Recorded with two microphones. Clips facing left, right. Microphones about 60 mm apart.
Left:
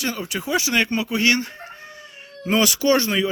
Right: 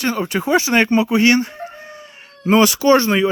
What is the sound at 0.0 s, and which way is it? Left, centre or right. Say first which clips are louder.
Speech: right 7 dB; right.